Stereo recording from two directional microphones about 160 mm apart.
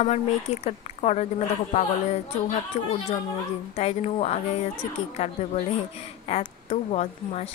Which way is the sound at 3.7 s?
40° left (ahead or behind).